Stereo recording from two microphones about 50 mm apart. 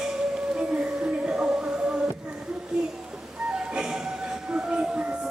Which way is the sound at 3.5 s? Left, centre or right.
Centre.